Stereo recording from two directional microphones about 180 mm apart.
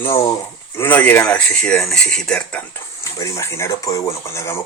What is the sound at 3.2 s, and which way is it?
Speech, 15° left (ahead or behind).